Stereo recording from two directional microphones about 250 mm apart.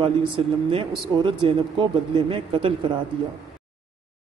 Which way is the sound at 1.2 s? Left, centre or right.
Centre.